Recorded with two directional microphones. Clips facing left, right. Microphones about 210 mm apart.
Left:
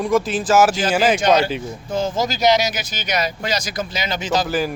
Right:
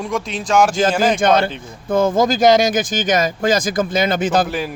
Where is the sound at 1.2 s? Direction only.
55° right (ahead or behind).